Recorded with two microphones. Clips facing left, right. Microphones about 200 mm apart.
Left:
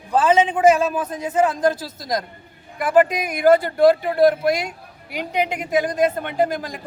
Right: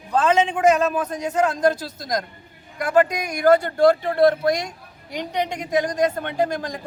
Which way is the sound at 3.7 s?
10° left (ahead or behind).